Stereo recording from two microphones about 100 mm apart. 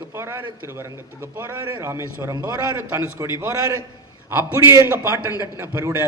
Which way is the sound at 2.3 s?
40° right (ahead or behind).